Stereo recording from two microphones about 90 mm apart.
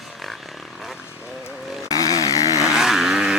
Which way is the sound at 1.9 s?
40° left (ahead or behind).